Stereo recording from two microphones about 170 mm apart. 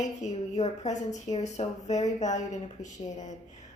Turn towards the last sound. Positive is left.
turn(degrees=45)  # may be behind; listen again after turning